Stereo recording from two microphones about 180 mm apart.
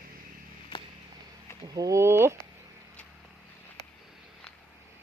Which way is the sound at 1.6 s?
20° right (ahead or behind).